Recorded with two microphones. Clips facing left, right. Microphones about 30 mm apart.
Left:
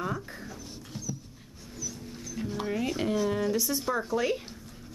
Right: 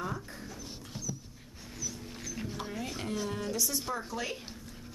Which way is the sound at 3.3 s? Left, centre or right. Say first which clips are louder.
Left 6 dB; centre.